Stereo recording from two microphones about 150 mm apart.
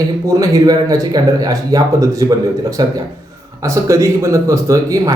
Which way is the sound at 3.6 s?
20° right (ahead or behind).